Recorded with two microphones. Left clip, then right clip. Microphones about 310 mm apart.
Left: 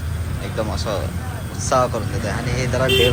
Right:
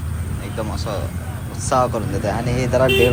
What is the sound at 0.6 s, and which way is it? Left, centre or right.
Speech, centre.